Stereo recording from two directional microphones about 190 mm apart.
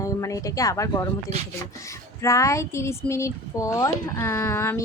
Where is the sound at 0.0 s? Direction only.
15° left (ahead or behind).